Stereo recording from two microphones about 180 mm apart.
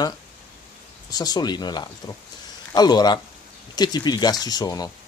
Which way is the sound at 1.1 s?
20° left (ahead or behind).